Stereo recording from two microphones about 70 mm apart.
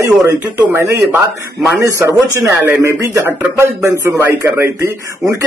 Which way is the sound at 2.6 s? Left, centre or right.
Right.